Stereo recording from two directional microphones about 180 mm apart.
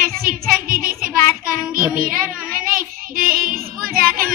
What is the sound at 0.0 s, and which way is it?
Child singing, 50° right (ahead or behind).